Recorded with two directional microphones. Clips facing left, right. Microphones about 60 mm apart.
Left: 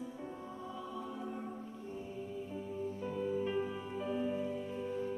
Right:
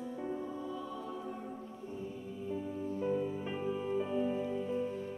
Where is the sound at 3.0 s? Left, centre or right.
Centre.